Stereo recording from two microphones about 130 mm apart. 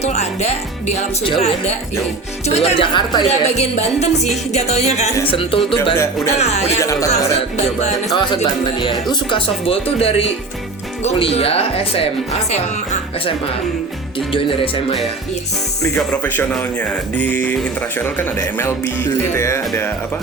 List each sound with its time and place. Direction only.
0.0 s speech: 55° left (ahead or behind)
2.9 s a woman's voice: 35° left (ahead or behind)
3.2 s speech: 55° left (ahead or behind)
5.3 s speech: 40° left (ahead or behind)
6.3 s speech: 55° left (ahead or behind)
6.7 s speech: 25° left (ahead or behind)
7.5 s speech: 60° left (ahead or behind)
8.1 s a woman's voice: 35° left (ahead or behind); by 13.3 s 55° left (ahead or behind)
14.3 s speech: 45° left (ahead or behind)
16.0 s speech: 10° left (ahead or behind)